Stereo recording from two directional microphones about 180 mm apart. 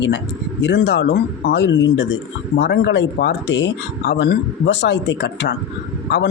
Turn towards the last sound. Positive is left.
turn(degrees=75)  # may be behind; listen again after turning